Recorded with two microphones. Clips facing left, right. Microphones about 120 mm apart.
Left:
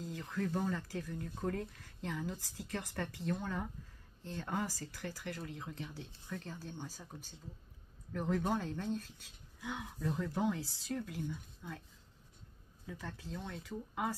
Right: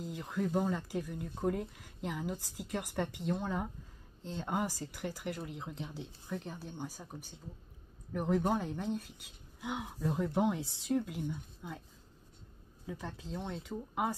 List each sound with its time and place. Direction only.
0.0 s speech: 15° right (ahead or behind)
12.8 s speech: 15° right (ahead or behind)